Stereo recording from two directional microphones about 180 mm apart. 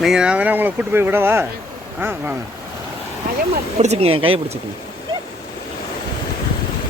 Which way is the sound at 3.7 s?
35° right (ahead or behind).